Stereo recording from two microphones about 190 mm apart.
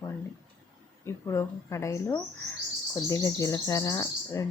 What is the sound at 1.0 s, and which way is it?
Speech, 15° left (ahead or behind).